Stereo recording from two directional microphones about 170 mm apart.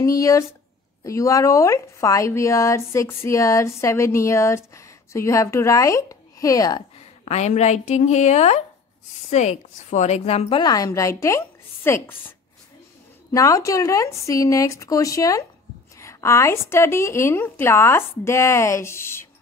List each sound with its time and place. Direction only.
0.0 s speech: 20° left (ahead or behind)
7.2 s a woman's voice: 40° left (ahead or behind)
10.6 s speech: 20° left (ahead or behind)